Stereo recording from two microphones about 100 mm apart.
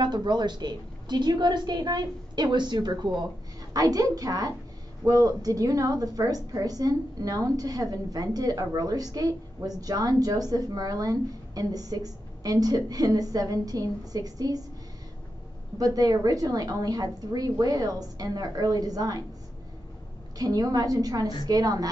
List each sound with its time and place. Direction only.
0.0 s a woman's voice: 45° right (ahead or behind)
15.8 s a woman's voice: 40° right (ahead or behind)
20.3 s a woman's voice: 40° right (ahead or behind)